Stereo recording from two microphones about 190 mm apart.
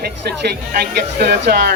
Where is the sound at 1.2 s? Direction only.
60° right (ahead or behind).